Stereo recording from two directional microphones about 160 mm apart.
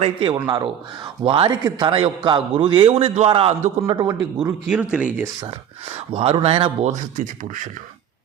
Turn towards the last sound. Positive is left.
turn(degrees=-55)  # may be behind; listen again after turning